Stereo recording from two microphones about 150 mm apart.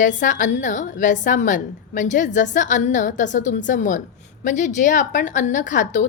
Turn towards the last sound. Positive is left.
turn(degrees=55)  # may be behind; listen again after turning